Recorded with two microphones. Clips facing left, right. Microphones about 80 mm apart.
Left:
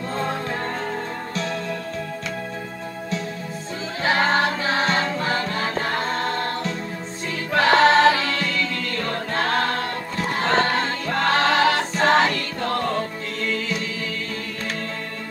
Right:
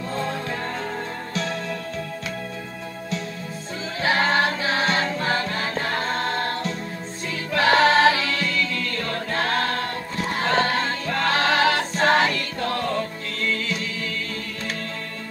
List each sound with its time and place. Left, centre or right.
0.1 s music: left
4.0 s music: left
7.5 s choir: left